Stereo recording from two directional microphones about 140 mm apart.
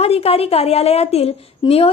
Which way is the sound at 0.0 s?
45° left (ahead or behind).